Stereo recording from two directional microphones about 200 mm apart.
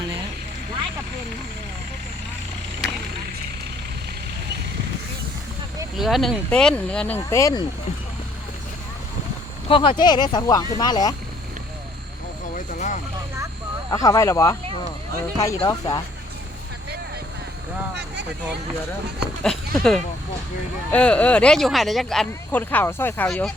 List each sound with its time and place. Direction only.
6.0 s speech: centre (ahead or behind); by 7.6 s 15° left (ahead or behind)
9.6 s speech: 25° left (ahead or behind)
12.5 s vehicle: 40° left (ahead or behind)
13.9 s speech: 15° left (ahead or behind)
19.4 s speech: 5° left (ahead or behind)